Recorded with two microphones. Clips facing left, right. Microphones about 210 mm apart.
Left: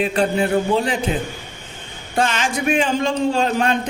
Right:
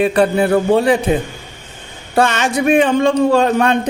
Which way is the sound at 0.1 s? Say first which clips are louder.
Right 5 dB; 65° right (ahead or behind).